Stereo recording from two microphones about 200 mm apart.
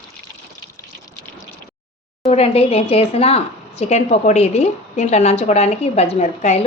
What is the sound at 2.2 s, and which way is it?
A woman's voice, 30° left (ahead or behind).